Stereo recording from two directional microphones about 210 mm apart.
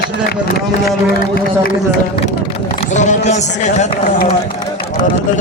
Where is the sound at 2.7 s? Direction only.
35° left (ahead or behind).